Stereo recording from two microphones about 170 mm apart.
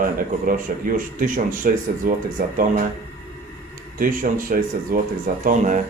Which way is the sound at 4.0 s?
55° right (ahead or behind).